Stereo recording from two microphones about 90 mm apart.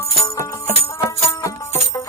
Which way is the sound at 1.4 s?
30° left (ahead or behind).